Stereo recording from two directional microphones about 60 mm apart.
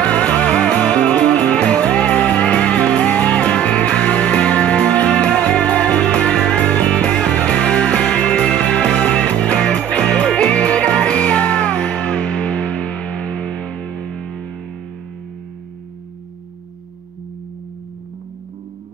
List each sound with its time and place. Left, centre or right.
0.0 s music: left